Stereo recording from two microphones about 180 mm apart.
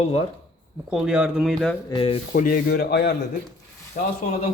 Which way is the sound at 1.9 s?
30° left (ahead or behind).